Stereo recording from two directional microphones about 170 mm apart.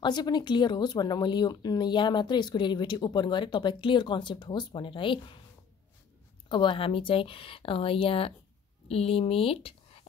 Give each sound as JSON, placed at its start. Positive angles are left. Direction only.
{"t": 0.0, "sound": "speech", "side_deg": 25}
{"t": 6.5, "sound": "speech", "side_deg": 30}